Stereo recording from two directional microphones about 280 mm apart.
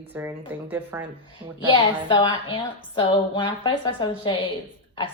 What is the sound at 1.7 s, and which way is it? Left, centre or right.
Speech, centre.